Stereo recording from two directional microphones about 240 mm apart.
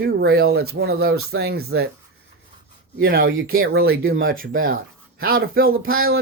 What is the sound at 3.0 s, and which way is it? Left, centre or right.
Speech, right.